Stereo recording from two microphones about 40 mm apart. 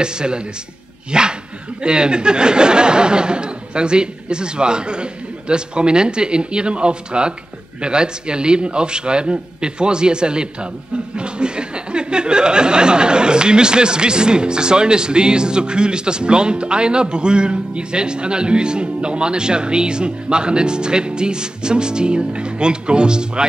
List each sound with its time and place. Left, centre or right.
0.0 s speech: right